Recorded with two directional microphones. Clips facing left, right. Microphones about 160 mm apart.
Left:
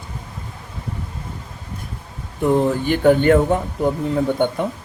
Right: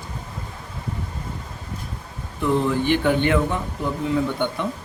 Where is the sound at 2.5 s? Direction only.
45° left (ahead or behind).